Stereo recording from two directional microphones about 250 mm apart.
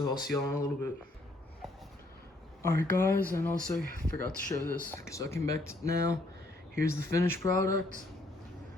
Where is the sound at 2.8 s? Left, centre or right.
Centre.